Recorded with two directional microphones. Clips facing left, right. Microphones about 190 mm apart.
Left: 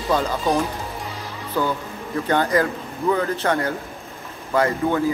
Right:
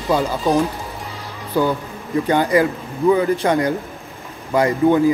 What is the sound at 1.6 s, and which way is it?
Speech, 10° right (ahead or behind).